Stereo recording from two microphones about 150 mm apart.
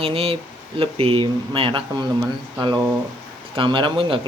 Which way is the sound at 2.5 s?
30° right (ahead or behind).